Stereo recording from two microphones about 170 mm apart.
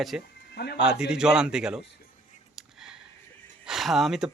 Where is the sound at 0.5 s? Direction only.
75° left (ahead or behind).